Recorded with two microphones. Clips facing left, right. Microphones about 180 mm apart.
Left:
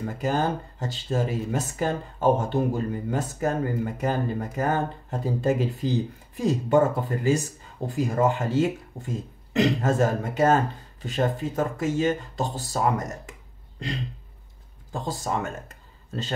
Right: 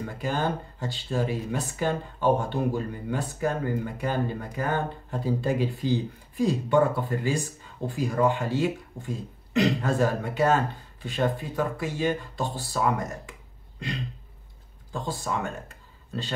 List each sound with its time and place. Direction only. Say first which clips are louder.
0.2 s speech: left 3 dB; 40° left (ahead or behind)
14.9 s speech: left 2 dB; 40° left (ahead or behind)